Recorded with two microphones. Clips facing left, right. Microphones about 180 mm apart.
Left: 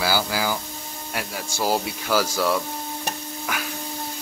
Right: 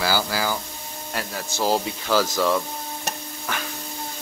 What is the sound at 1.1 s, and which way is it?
Speech, 10° left (ahead or behind).